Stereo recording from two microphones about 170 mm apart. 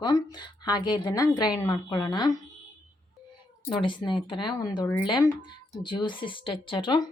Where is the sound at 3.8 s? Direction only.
30° left (ahead or behind).